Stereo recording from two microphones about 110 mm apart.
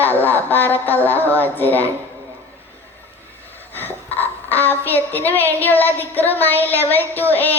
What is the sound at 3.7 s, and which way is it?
A woman's voice, 15° left (ahead or behind).